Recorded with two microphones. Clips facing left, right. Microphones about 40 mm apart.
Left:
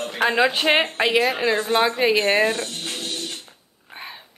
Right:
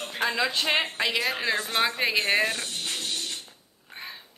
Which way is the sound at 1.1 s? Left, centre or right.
Left.